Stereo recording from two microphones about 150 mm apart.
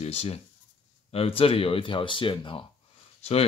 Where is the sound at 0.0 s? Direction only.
45° left (ahead or behind).